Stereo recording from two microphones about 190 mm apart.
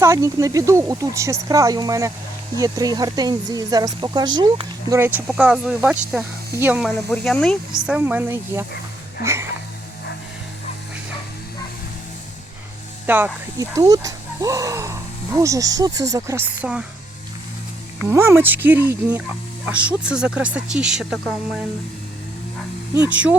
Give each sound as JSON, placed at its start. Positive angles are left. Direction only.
{"t": 0.0, "sound": "speech", "side_deg": -15}
{"t": 13.1, "sound": "speech", "side_deg": -10}
{"t": 18.0, "sound": "speech", "side_deg": -15}
{"t": 23.0, "sound": "speech", "side_deg": -5}